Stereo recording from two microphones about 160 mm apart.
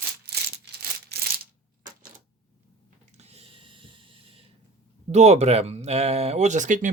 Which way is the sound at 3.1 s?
40° right (ahead or behind).